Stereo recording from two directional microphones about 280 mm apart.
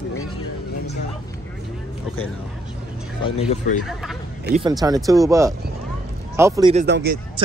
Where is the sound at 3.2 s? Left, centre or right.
Left.